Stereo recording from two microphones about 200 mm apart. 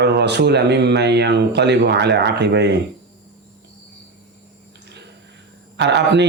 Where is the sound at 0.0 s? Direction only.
55° right (ahead or behind).